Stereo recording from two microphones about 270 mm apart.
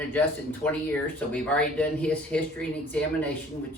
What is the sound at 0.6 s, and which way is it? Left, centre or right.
Speech, centre.